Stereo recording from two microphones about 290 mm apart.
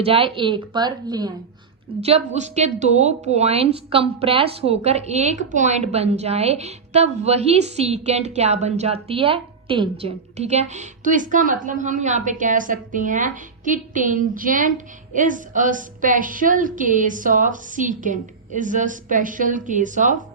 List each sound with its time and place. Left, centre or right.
0.0 s a woman's voice: centre